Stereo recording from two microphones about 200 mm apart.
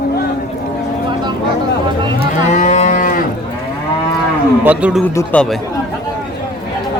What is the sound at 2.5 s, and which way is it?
Moo, 35° left (ahead or behind).